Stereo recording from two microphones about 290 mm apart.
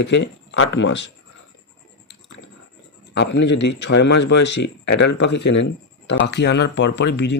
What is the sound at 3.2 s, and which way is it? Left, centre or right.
Speech, left.